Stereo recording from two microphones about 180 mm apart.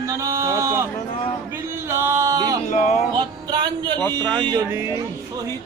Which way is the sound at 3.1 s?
25° right (ahead or behind).